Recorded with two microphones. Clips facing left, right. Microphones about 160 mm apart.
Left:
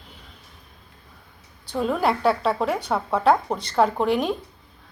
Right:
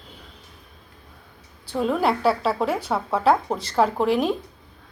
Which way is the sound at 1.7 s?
Centre (ahead or behind).